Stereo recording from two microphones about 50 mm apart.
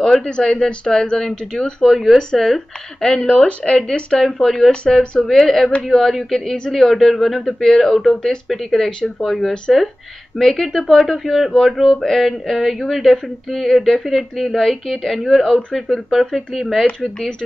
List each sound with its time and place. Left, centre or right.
0.2 s speech: centre
1.9 s speech: centre
3.3 s speech: left
4.3 s speech: centre